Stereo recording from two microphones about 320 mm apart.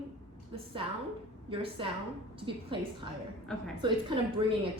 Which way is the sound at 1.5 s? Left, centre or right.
Centre.